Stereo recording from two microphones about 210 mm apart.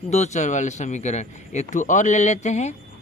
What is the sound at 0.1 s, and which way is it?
Speech, 35° left (ahead or behind).